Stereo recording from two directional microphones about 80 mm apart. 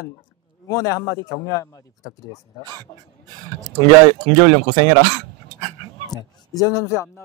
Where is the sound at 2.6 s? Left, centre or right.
Right.